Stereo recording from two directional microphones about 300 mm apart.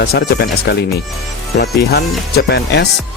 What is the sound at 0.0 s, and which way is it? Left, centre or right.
Speech, left.